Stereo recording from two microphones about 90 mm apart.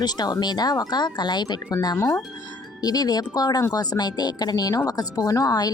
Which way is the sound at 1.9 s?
30° left (ahead or behind).